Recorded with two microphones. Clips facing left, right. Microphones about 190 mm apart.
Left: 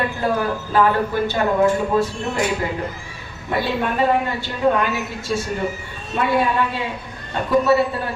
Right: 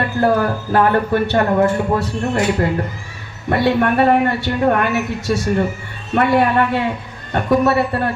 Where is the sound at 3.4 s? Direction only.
70° right (ahead or behind).